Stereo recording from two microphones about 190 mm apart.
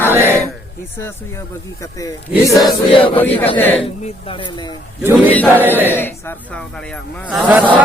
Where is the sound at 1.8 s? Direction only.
20° left (ahead or behind).